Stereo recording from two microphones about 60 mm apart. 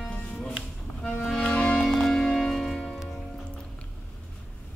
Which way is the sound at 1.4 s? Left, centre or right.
Centre.